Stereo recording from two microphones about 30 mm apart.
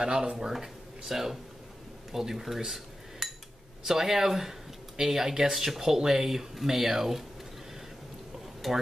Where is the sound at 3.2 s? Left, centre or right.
Centre.